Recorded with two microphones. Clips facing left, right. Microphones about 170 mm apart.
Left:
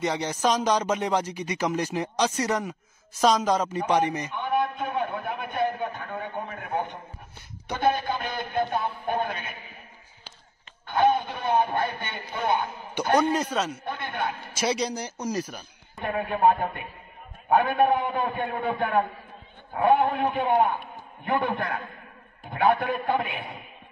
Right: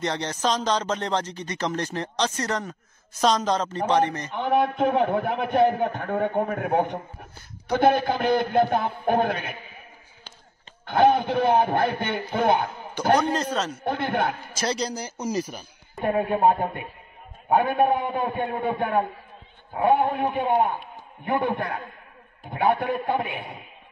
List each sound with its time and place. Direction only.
0.0 s speech: 10° left (ahead or behind)
4.4 s a man's voice: 65° right (ahead or behind)
10.9 s a man's voice: 65° right (ahead or behind)
13.3 s speech: 10° left (ahead or behind)
13.8 s a man's voice: 50° right (ahead or behind)
14.5 s a man's voice: 5° left (ahead or behind)
16.0 s a man's voice: 30° right (ahead or behind)